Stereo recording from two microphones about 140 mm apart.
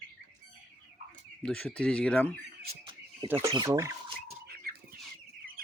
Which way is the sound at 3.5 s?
25° right (ahead or behind).